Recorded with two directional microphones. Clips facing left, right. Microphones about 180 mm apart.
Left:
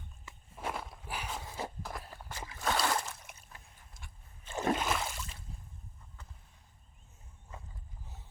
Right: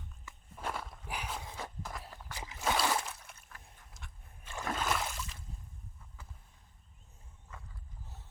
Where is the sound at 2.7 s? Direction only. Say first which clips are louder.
Even; centre (ahead or behind).